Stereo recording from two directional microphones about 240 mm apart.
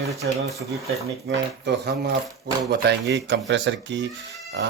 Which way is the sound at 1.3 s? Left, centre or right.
Right.